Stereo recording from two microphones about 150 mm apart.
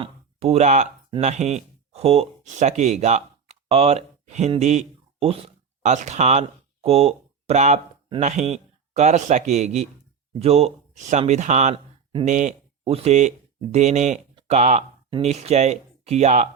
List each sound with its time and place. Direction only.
0.0 s speech: 40° right (ahead or behind)